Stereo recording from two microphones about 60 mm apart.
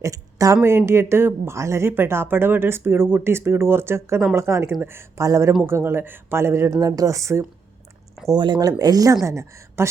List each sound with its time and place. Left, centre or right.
0.0 s speech: right
0.9 s speech: right
1.9 s speech: right
5.6 s speech: right
6.7 s speech: right
8.3 s speech: right
9.2 s a woman's voice: right